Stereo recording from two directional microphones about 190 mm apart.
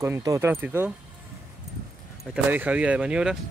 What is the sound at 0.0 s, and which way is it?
Speech, 15° right (ahead or behind).